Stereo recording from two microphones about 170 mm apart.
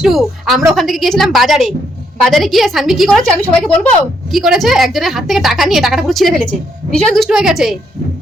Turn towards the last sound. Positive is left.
turn(degrees=0)  # may be behind; listen again after turning